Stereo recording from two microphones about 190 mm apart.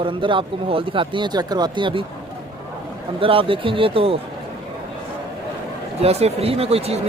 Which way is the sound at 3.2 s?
30° right (ahead or behind).